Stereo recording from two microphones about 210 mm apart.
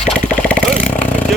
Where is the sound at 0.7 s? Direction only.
35° left (ahead or behind).